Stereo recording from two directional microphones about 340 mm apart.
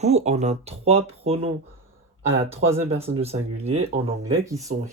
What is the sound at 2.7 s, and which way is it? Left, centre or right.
Speech, centre.